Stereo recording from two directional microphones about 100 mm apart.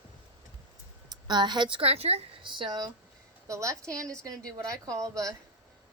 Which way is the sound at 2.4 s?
55° right (ahead or behind).